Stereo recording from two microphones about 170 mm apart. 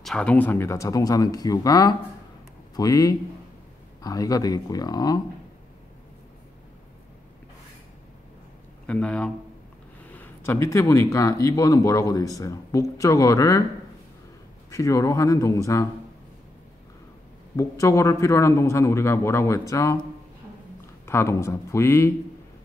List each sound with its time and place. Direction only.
0.0 s a man's voice: 5° left (ahead or behind); by 5.2 s 25° left (ahead or behind)
8.8 s a man's voice: 5° left (ahead or behind)
14.7 s speech: 20° left (ahead or behind)
17.6 s a man's voice: 15° left (ahead or behind)
21.0 s a man's voice: 15° left (ahead or behind)